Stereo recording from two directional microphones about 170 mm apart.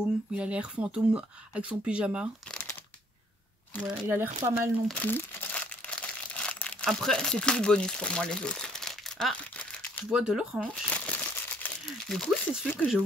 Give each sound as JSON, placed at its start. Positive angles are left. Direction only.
{"t": 0.0, "sound": "speech", "side_deg": -5}
{"t": 3.9, "sound": "speech", "side_deg": -10}
{"t": 4.8, "sound": "crumpling", "side_deg": 10}
{"t": 10.1, "sound": "speech", "side_deg": -5}
{"t": 10.9, "sound": "crumpling", "side_deg": 10}